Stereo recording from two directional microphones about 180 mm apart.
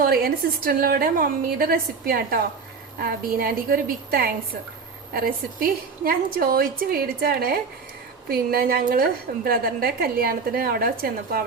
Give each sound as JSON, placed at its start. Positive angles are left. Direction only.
{"t": 0.0, "sound": "a woman's voice", "side_deg": -55}